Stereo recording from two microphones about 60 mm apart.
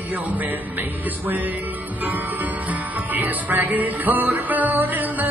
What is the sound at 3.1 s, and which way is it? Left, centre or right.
Music, right.